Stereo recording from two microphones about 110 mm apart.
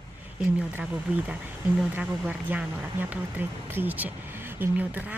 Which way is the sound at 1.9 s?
15° right (ahead or behind).